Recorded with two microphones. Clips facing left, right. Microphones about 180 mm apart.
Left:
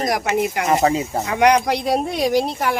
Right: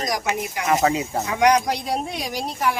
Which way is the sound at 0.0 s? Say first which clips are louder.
Left 5 dB; 60° left (ahead or behind).